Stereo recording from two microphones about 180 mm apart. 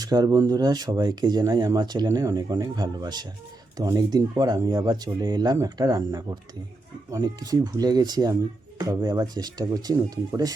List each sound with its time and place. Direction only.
0.0 s speech: 20° right (ahead or behind)